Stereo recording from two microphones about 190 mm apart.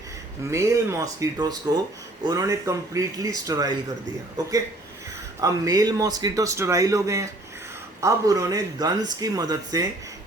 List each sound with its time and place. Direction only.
0.5 s a man's voice: 15° right (ahead or behind)
5.4 s a man's voice: 20° right (ahead or behind)